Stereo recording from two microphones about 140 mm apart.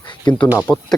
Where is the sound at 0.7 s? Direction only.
10° left (ahead or behind).